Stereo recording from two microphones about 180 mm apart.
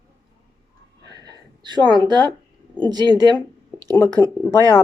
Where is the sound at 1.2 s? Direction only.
25° right (ahead or behind).